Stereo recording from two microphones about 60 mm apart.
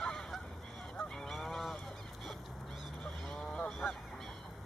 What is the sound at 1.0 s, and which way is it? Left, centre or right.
Goose, centre.